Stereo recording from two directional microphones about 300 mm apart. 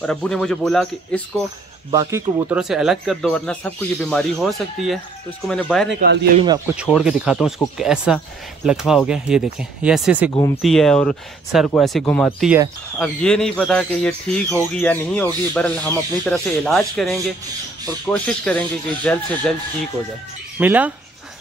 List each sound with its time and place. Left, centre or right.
0.0 s speech: centre
1.9 s speech: centre
5.9 s a man's voice: right
6.4 s speech: centre
10.3 s speech: centre
20.5 s speech: centre